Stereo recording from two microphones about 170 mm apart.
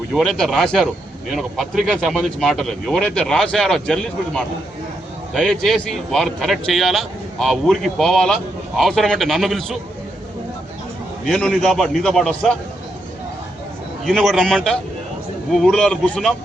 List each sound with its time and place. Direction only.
0.1 s speech: centre (ahead or behind)
11.3 s speech: 5° left (ahead or behind)
14.0 s speech: centre (ahead or behind)